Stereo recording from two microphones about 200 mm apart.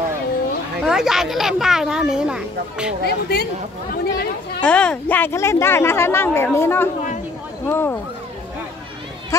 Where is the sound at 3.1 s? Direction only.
55° left (ahead or behind).